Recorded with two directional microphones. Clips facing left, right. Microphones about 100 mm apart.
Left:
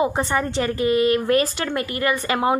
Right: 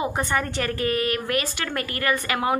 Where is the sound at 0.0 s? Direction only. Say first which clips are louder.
Left 4 dB; 25° left (ahead or behind).